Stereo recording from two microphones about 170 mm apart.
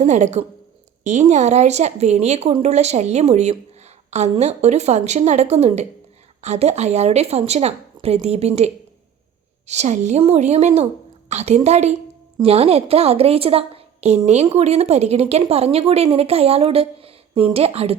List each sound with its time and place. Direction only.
0.0 s a woman's voice: 45° right (ahead or behind)